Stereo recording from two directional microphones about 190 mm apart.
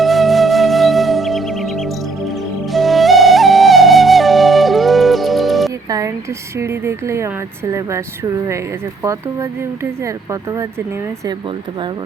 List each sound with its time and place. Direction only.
0.0 s music: centre (ahead or behind)
2.7 s flute: centre (ahead or behind)
5.9 s a sound: 15° right (ahead or behind)
6.6 s speech: 15° right (ahead or behind)